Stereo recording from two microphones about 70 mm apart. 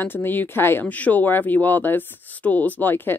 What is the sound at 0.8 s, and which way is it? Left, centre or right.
A woman's voice, left.